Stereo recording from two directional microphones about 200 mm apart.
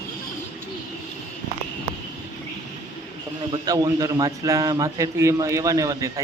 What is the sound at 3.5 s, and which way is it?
A man's voice, 20° right (ahead or behind).